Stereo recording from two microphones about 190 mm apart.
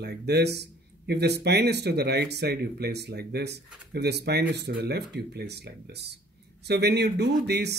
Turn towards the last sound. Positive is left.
turn(degrees=-60)  # may be behind; listen again after turning